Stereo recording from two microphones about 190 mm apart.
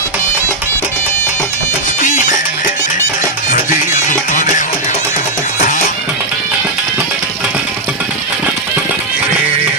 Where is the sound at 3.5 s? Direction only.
40° left (ahead or behind).